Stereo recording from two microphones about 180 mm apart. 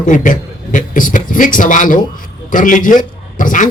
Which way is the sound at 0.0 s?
45° left (ahead or behind).